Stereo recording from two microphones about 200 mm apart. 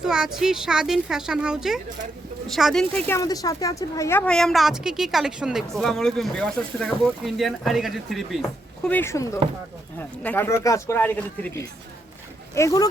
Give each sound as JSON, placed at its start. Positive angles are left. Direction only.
{"t": 0.0, "sound": "a woman's voice", "side_deg": -5}
{"t": 3.2, "sound": "a woman's voice", "side_deg": 15}